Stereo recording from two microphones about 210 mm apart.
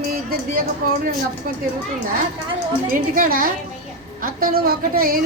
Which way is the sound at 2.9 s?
40° right (ahead or behind).